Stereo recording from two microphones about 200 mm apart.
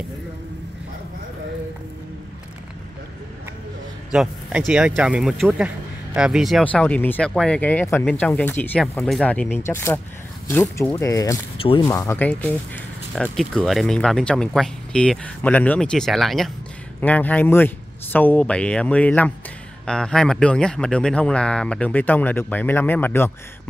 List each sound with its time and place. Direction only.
4.1 s speech: 5° right (ahead or behind); by 11.3 s 15° left (ahead or behind)
11.5 s speech: 30° left (ahead or behind)
11.8 s speech: 15° left (ahead or behind)